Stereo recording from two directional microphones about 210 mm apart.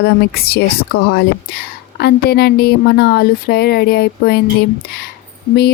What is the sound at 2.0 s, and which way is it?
A woman's voice, 50° left (ahead or behind).